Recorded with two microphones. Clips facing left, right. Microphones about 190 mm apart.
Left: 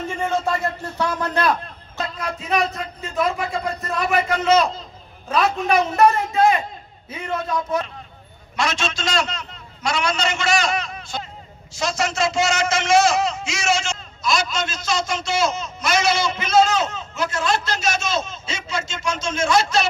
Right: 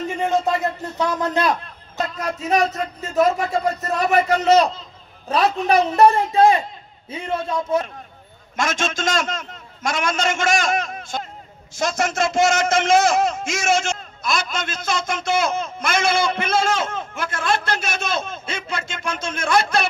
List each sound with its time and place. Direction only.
0.2 s speech: 20° right (ahead or behind)
2.0 s speech: 40° right (ahead or behind)
8.5 s a man's voice: 50° right (ahead or behind)